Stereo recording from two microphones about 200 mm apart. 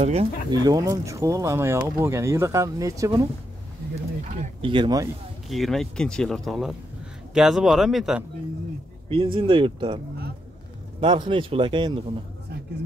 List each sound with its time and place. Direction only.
0.0 s speech: 30° right (ahead or behind)
0.7 s speech: 15° right (ahead or behind)
4.6 s a man's voice: 25° right (ahead or behind)
5.5 s speech: centre (ahead or behind)
9.1 s a man's voice: 25° right (ahead or behind)
11.0 s a man's voice: 25° right (ahead or behind)